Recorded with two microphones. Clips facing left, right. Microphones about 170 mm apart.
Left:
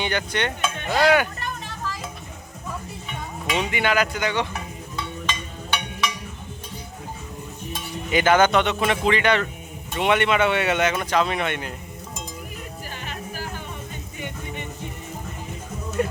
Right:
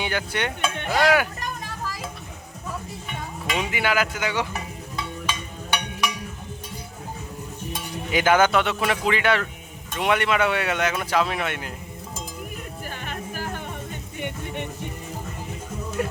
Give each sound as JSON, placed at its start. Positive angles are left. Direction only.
{"t": 0.0, "sound": "speech", "side_deg": -5}
{"t": 3.4, "sound": "speech", "side_deg": -5}
{"t": 5.2, "sound": "music", "side_deg": -10}
{"t": 7.7, "sound": "speech", "side_deg": -10}
{"t": 13.1, "sound": "music", "side_deg": -50}
{"t": 16.0, "sound": "speech", "side_deg": -5}